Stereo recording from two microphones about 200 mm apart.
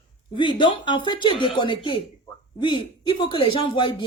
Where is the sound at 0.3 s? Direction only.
25° left (ahead or behind).